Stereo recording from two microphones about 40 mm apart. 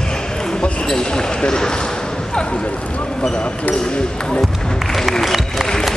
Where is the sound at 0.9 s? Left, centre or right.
Centre.